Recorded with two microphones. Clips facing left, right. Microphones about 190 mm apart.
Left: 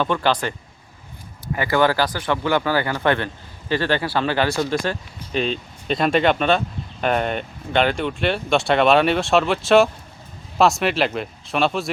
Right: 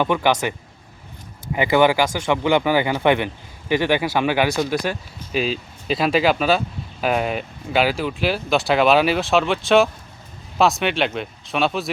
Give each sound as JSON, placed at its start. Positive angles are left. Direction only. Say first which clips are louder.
{"t": 0.0, "sound": "speech", "louder": "right 2 dB", "side_deg": -15}
{"t": 1.5, "sound": "speech", "louder": "right 2 dB", "side_deg": -15}